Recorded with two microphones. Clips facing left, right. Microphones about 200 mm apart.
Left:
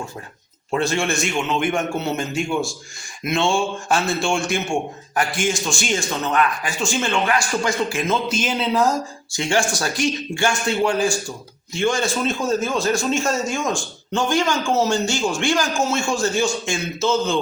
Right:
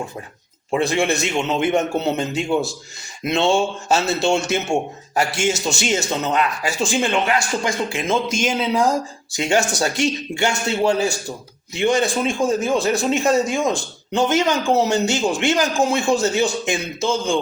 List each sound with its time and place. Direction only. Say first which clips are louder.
0.7 s a man's voice: right 2 dB; 15° right (ahead or behind)
8.1 s a man's voice: right 2 dB; 10° right (ahead or behind)